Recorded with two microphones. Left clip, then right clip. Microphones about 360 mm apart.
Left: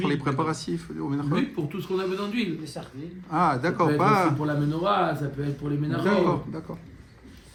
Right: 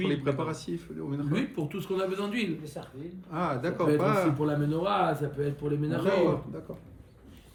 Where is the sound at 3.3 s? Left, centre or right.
Centre.